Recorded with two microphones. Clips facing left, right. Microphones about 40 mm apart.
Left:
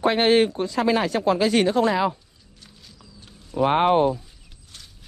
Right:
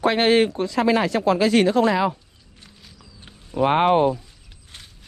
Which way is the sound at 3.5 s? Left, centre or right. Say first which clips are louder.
Right 1 dB; right.